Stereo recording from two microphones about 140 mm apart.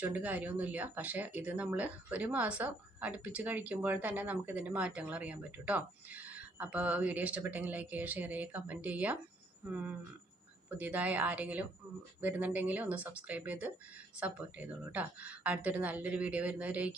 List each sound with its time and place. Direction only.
0.0 s speech: 10° right (ahead or behind)